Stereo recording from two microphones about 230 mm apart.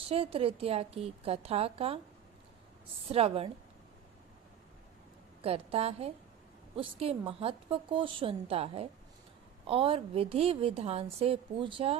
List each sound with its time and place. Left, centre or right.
0.0 s a woman's voice: right
3.1 s a woman's voice: right
5.4 s a woman's voice: right